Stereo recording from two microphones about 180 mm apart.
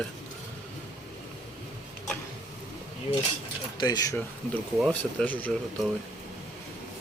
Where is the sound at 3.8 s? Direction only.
20° left (ahead or behind).